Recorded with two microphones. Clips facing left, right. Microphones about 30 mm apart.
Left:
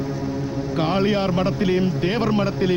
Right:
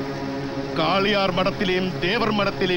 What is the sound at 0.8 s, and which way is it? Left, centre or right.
Speech, right.